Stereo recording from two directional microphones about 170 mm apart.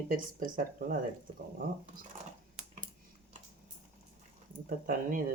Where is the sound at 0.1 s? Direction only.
55° right (ahead or behind).